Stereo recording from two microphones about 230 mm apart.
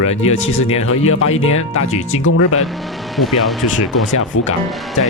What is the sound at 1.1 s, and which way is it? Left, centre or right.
Speech, left.